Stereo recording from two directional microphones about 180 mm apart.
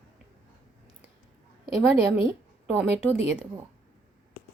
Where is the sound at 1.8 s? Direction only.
10° right (ahead or behind).